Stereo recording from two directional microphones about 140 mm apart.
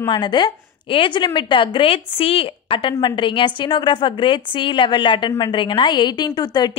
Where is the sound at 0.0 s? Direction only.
35° left (ahead or behind).